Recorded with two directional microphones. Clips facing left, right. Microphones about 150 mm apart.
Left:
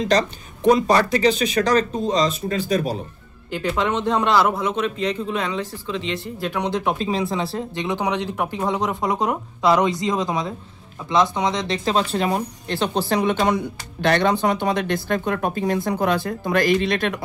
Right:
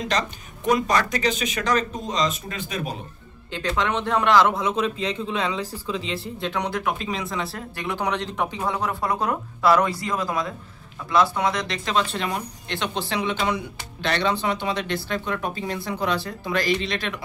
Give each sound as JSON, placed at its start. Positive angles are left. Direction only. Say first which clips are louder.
{"t": 0.1, "sound": "speech", "louder": "left 6 dB", "side_deg": 35}
{"t": 3.5, "sound": "speech", "louder": "left 3 dB", "side_deg": 10}
{"t": 6.7, "sound": "speech", "louder": "left 4 dB", "side_deg": 30}